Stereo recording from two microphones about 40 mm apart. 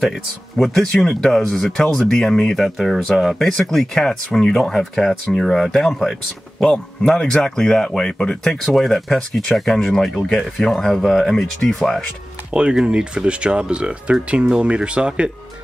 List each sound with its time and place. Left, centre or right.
0.0 s speech: centre
2.5 s speech: centre
3.4 s speech: centre
7.1 s speech: centre
8.5 s speech: centre
12.5 s speech: centre